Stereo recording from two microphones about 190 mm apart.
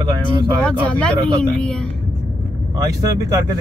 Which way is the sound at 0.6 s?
5° left (ahead or behind).